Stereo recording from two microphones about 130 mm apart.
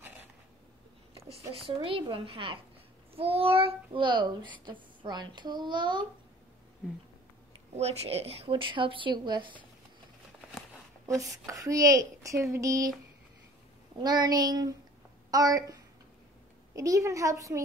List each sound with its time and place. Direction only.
1.8 s a child's voice: 40° right (ahead or behind)
7.7 s a child's voice: 55° right (ahead or behind); by 9.6 s 35° right (ahead or behind)
11.2 s speech: 25° right (ahead or behind)
13.9 s a child's voice: 35° right (ahead or behind)